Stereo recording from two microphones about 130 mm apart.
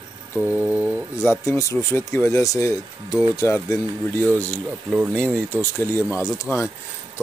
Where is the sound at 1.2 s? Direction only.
15° left (ahead or behind).